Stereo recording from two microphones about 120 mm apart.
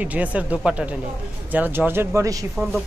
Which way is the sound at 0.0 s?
10° right (ahead or behind).